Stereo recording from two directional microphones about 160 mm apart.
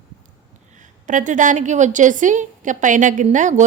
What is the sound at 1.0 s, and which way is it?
A woman's voice, 50° right (ahead or behind).